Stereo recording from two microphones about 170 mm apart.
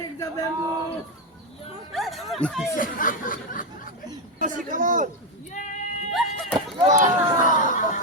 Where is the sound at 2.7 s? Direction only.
55° left (ahead or behind).